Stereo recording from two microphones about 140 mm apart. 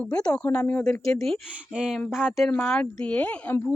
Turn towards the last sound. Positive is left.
turn(degrees=10)  # may be behind; listen again after turning